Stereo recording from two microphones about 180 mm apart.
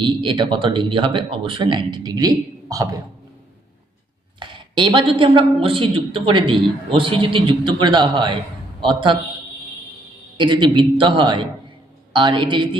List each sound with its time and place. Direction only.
0.0 s speech: 25° right (ahead or behind)
4.4 s speech: 25° right (ahead or behind)
10.3 s speech: 25° right (ahead or behind)